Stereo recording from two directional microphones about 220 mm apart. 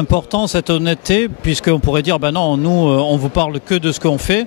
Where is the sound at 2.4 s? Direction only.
25° left (ahead or behind).